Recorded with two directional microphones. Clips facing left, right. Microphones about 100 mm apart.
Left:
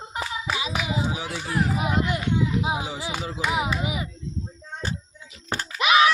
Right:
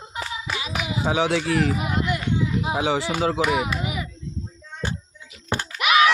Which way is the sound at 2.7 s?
85° right.